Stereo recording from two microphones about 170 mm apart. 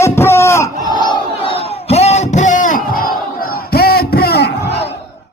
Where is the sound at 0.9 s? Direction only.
25° left (ahead or behind); by 4.9 s 75° left (ahead or behind).